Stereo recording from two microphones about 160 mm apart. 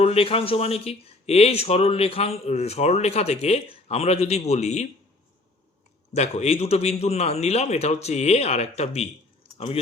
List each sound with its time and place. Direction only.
0.0 s speech: 40° left (ahead or behind)
6.1 s speech: 45° left (ahead or behind)